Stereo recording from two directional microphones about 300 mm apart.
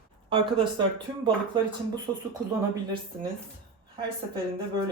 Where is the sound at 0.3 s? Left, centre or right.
Centre.